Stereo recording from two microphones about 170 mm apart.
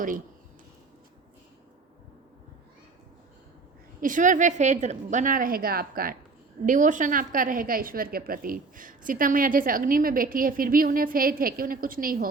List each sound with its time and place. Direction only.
4.0 s a woman's voice: 50° right (ahead or behind)